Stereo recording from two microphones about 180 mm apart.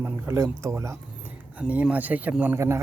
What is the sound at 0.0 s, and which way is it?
Speech, 15° right (ahead or behind).